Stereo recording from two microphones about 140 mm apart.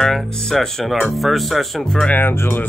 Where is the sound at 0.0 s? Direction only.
5° left (ahead or behind).